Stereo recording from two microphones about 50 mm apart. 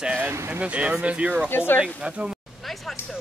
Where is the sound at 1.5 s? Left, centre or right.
Left.